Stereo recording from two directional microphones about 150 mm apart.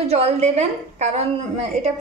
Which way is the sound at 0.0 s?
45° right (ahead or behind).